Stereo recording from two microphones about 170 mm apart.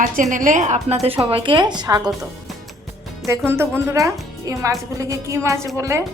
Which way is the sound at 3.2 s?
15° right (ahead or behind).